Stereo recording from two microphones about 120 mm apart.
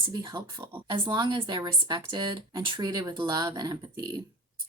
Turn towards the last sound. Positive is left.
turn(degrees=-35)  # may be behind; listen again after turning